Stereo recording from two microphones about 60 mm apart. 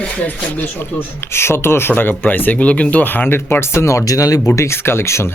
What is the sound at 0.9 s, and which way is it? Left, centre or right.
Speech, left.